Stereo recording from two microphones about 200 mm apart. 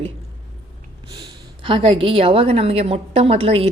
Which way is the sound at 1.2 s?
25° right (ahead or behind).